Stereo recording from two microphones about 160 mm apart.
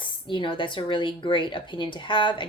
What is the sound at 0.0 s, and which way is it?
Speech, 30° left (ahead or behind).